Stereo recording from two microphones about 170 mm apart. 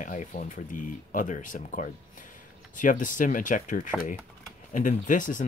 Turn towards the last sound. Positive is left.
turn(degrees=50)  # may be behind; listen again after turning